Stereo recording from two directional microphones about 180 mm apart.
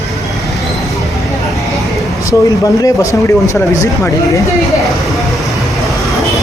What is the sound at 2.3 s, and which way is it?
Speech, 20° left (ahead or behind).